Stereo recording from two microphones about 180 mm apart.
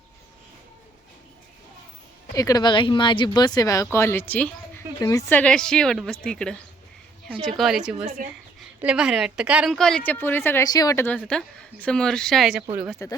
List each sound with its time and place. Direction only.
2.3 s a woman's voice: 20° left (ahead or behind); by 13.0 s 5° right (ahead or behind)